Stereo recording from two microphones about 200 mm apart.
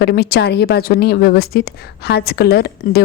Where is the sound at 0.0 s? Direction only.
50° left (ahead or behind).